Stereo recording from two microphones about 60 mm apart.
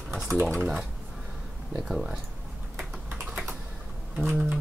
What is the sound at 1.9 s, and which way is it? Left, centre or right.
Speech, centre.